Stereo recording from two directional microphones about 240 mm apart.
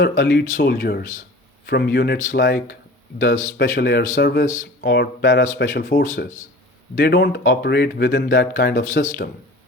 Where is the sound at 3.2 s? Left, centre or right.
Left.